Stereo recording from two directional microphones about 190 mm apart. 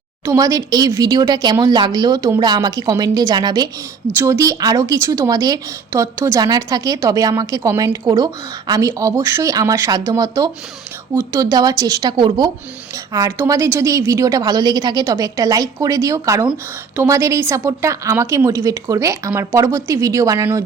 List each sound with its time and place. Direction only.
0.3 s a woman's voice: 15° right (ahead or behind)